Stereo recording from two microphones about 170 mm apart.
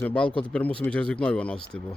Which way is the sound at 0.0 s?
5° left (ahead or behind).